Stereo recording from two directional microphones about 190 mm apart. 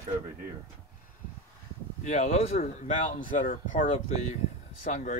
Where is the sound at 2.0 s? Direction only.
40° left (ahead or behind).